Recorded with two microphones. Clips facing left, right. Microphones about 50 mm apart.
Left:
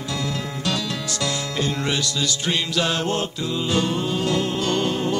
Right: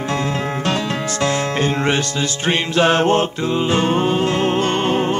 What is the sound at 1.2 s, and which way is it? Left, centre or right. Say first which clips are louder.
Music: right 7 dB; right.